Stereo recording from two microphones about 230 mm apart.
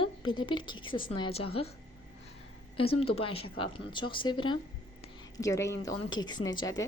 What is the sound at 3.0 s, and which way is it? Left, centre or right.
A woman's voice, left.